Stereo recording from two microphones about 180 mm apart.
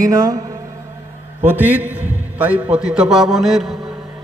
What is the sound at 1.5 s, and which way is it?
A man's voice, 10° right (ahead or behind).